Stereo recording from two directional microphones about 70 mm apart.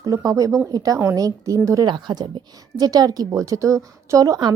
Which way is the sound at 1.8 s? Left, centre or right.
Right.